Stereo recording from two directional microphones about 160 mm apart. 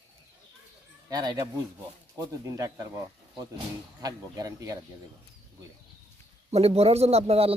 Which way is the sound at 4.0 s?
25° right (ahead or behind).